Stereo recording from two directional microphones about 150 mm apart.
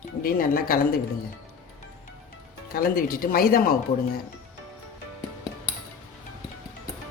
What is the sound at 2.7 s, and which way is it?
Speech, 75° left (ahead or behind).